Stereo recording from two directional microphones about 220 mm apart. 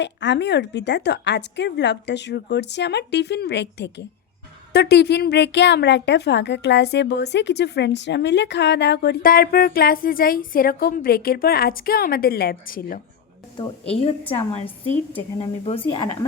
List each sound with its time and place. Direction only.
0.0 s a woman's voice: 55° left (ahead or behind)
13.9 s a woman's voice: 25° left (ahead or behind)